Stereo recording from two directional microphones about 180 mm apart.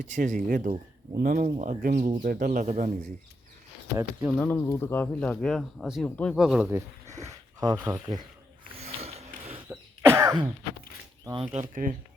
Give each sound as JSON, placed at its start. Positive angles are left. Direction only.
{"t": 0.0, "sound": "speech", "side_deg": -45}
{"t": 4.4, "sound": "speech", "side_deg": 15}
{"t": 6.3, "sound": "speech", "side_deg": -5}
{"t": 6.7, "sound": "speech", "side_deg": -15}
{"t": 8.8, "sound": "sniff", "side_deg": -35}
{"t": 9.6, "sound": "cough", "side_deg": -15}
{"t": 11.3, "sound": "speech", "side_deg": -30}